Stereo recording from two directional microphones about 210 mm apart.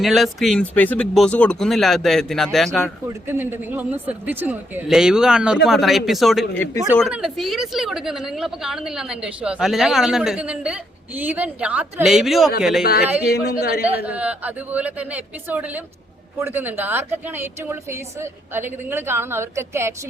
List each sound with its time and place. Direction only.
0.0 s a woman's voice: centre (ahead or behind)
3.1 s a woman's voice: 10° right (ahead or behind)
6.6 s speech: 10° left (ahead or behind)
7.1 s a woman's voice: centre (ahead or behind)
13.6 s speech: 50° left (ahead or behind)
13.8 s a woman's voice: 5° right (ahead or behind)